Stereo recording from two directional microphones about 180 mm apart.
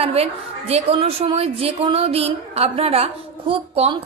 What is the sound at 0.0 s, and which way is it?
A woman's voice, 35° right (ahead or behind).